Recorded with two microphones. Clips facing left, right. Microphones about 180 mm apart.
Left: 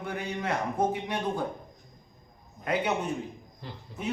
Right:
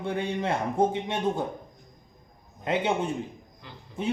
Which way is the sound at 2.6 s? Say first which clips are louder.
Right 2 dB; 25° right (ahead or behind).